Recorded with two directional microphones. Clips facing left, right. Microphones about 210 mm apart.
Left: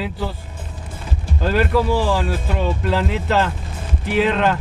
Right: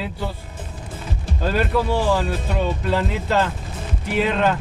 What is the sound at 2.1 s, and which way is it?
Speech, centre (ahead or behind).